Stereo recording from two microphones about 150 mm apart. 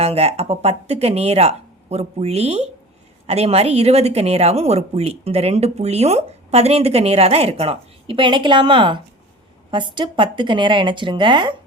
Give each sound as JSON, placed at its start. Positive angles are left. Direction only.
{"t": 0.0, "sound": "speech", "side_deg": -40}